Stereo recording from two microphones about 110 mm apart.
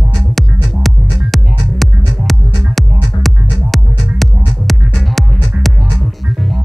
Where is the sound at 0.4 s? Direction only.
Centre (ahead or behind).